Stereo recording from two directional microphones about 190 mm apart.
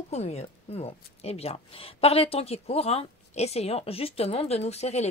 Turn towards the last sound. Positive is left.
turn(degrees=35)  # may be behind; listen again after turning